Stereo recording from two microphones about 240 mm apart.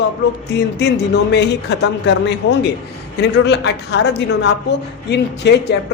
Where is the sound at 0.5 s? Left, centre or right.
Left.